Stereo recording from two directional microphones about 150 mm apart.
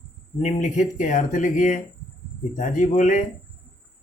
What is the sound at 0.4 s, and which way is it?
Speech, 55° left (ahead or behind).